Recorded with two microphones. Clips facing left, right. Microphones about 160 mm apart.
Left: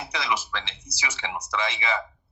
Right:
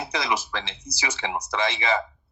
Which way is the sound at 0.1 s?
40° right (ahead or behind).